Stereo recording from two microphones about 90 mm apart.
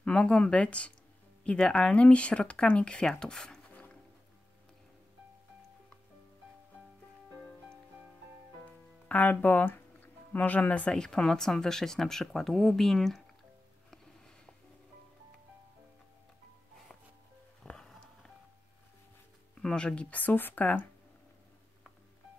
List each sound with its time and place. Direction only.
0.0 s speech: 10° left (ahead or behind)
9.1 s speech: 20° left (ahead or behind); by 13.2 s 5° left (ahead or behind)
13.8 s music: 5° left (ahead or behind)
17.6 s music: 5° left (ahead or behind)
19.5 s speech: 10° left (ahead or behind)